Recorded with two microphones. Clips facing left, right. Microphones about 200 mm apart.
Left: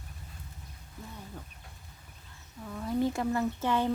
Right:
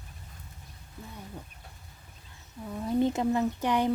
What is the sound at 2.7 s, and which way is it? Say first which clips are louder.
Speech: right 3 dB; 20° right (ahead or behind).